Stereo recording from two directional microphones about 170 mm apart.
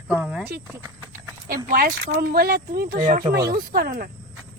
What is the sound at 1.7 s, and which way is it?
Speech, 55° right (ahead or behind).